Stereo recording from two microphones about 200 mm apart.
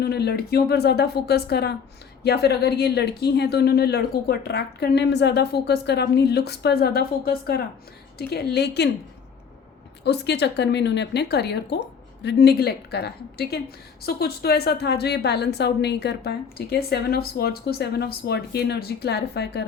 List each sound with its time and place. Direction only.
0.0 s a woman's voice: 55° left (ahead or behind)
10.0 s a woman's voice: 55° left (ahead or behind)